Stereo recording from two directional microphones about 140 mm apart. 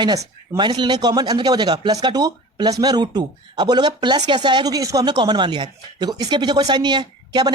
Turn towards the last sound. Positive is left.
turn(degrees=-30)  # may be behind; listen again after turning